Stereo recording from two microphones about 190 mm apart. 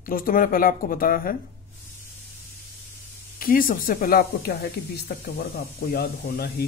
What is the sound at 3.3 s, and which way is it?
Speech, 50° left (ahead or behind).